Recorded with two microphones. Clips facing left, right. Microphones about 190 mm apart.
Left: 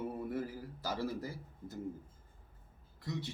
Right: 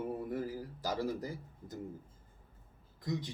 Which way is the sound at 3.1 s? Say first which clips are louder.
Right 3 dB; 15° right (ahead or behind).